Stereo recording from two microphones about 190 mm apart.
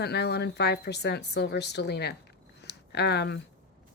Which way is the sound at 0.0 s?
60° left (ahead or behind).